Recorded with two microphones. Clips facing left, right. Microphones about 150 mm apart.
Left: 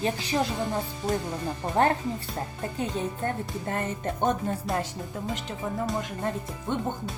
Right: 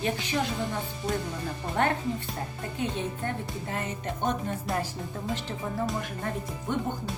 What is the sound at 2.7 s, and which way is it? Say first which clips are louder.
Speech: left 1 dB; 40° left (ahead or behind).